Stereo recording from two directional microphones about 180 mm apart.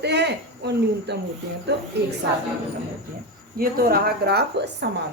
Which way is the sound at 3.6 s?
55° right (ahead or behind).